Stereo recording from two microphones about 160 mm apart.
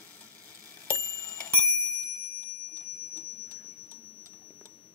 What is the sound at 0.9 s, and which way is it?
Bicycle bell, 10° left (ahead or behind).